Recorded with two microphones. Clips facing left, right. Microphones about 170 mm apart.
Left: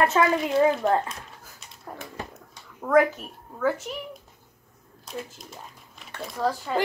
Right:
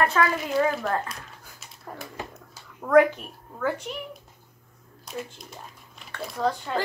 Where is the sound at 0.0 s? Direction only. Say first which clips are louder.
Left 2 dB; 20° left (ahead or behind).